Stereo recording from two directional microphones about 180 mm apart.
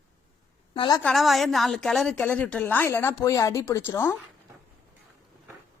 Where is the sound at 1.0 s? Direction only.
Centre (ahead or behind).